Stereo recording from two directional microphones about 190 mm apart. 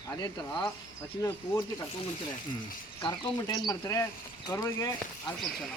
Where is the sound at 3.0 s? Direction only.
20° left (ahead or behind).